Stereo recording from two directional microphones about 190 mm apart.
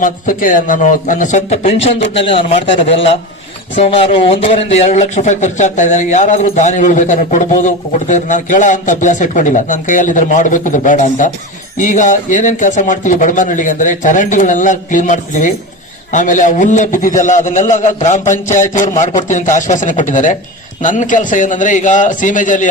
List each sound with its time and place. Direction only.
0.0 s a man's voice: 45° left (ahead or behind)